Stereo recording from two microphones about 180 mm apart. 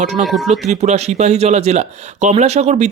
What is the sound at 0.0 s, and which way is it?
Speech, 40° right (ahead or behind).